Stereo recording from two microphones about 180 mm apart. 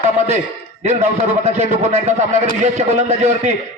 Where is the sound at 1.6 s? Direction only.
40° right (ahead or behind).